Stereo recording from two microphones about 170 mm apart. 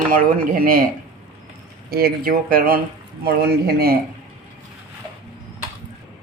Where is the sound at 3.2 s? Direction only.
70° right (ahead or behind).